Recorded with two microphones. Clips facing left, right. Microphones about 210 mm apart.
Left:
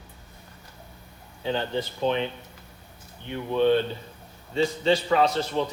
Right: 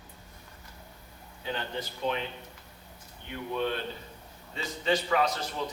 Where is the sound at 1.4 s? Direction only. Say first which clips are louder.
Left 8 dB; 30° left (ahead or behind).